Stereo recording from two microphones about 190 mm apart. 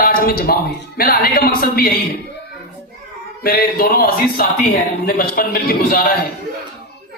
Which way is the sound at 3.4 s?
55° left (ahead or behind).